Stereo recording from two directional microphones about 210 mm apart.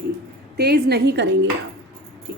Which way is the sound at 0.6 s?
50° right (ahead or behind).